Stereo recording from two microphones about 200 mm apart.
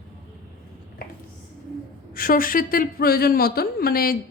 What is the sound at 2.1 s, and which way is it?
A woman's voice, 45° left (ahead or behind).